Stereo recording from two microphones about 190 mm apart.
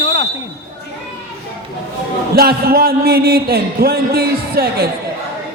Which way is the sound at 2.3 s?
55° right (ahead or behind).